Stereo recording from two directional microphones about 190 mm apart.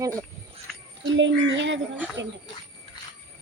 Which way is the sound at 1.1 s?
75° right (ahead or behind).